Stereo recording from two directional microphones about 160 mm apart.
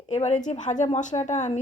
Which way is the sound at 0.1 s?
45° left (ahead or behind).